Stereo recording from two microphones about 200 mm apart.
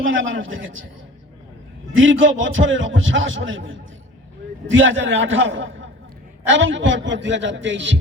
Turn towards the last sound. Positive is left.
turn(degrees=-65)  # may be behind; listen again after turning